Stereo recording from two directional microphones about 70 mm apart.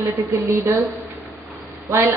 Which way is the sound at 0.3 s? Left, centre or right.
Right.